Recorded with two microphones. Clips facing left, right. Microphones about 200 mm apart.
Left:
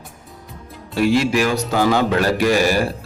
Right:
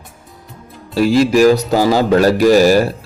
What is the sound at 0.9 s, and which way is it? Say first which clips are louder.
Speech: right 5 dB; 35° right (ahead or behind).